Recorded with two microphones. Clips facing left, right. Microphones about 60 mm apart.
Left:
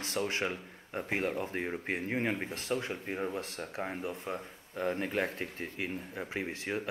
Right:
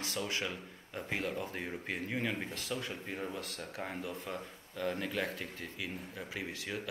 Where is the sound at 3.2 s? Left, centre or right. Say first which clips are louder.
Left 4 dB; left.